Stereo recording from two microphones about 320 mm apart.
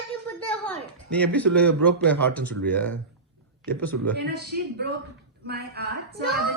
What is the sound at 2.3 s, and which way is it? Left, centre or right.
Speech, centre.